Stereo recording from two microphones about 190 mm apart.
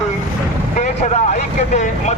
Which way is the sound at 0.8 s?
40° left (ahead or behind).